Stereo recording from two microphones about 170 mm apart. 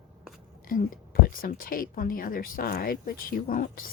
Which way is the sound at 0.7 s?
55° left (ahead or behind).